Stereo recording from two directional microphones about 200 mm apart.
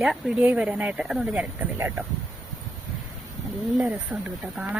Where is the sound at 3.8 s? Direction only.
5° right (ahead or behind).